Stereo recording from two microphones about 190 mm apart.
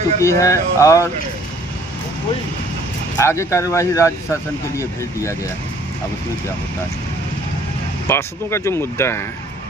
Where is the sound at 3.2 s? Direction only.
15° left (ahead or behind).